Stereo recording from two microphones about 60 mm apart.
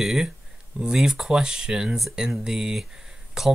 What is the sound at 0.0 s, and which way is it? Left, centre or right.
Speech, centre.